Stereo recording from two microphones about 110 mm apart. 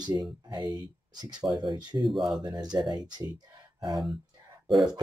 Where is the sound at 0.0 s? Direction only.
40° right (ahead or behind).